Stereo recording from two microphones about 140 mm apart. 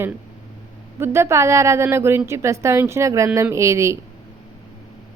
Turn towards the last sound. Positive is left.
turn(degrees=-20)  # may be behind; listen again after turning